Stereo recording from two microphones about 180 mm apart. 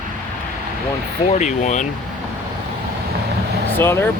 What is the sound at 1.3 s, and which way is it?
Speech, 40° left (ahead or behind).